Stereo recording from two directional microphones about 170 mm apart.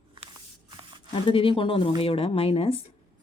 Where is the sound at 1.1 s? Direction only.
30° left (ahead or behind).